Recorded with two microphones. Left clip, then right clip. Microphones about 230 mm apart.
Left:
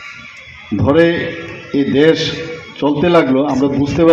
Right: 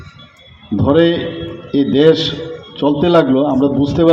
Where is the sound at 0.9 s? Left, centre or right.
Right.